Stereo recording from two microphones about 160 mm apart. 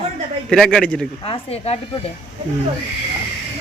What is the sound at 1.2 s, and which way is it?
Speech, 40° left (ahead or behind).